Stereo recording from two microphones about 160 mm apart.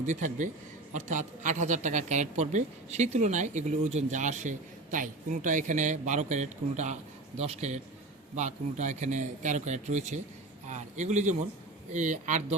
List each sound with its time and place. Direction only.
0.0 s a woman's voice: 50° right (ahead or behind)